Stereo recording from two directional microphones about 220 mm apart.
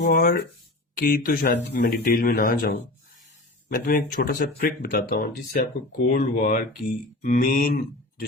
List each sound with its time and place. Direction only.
0.0 s speech: 40° left (ahead or behind)